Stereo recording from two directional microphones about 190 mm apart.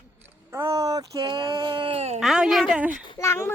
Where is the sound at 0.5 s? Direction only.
15° right (ahead or behind); by 2.2 s 35° right (ahead or behind).